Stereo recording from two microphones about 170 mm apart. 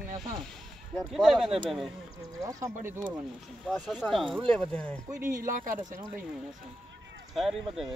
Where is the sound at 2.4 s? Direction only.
20° right (ahead or behind).